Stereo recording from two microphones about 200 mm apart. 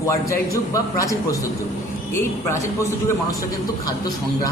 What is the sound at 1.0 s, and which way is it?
A man's voice, 15° left (ahead or behind).